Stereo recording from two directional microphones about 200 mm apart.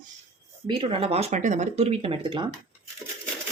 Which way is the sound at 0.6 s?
25° right (ahead or behind).